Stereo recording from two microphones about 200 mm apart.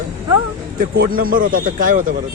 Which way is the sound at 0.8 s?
45° right (ahead or behind).